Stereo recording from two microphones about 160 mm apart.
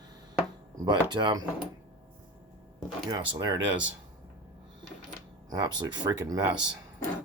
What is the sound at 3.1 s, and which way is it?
Speech, 30° right (ahead or behind).